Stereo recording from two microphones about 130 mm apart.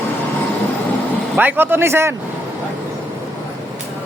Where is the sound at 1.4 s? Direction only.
15° right (ahead or behind).